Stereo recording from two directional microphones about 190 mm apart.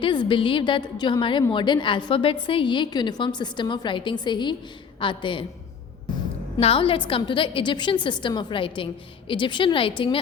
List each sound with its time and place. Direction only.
0.0 s a woman's voice: 25° left (ahead or behind)
6.6 s a woman's voice: 30° left (ahead or behind)